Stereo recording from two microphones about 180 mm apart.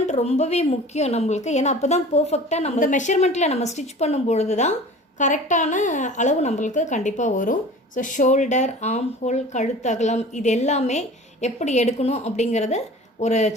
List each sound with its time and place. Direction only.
0.1 s a woman's voice: 40° left (ahead or behind)